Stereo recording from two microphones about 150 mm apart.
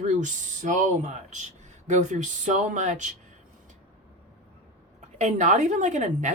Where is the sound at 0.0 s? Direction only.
55° right (ahead or behind).